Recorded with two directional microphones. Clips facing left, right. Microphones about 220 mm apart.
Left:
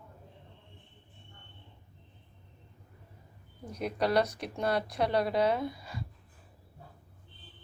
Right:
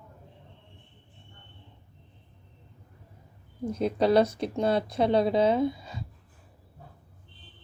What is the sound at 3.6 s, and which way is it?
Speech, 25° right (ahead or behind).